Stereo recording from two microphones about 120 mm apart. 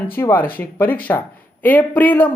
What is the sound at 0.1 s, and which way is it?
Speech, 20° left (ahead or behind).